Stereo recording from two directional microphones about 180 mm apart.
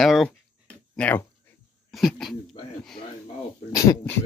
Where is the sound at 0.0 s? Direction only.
Centre (ahead or behind).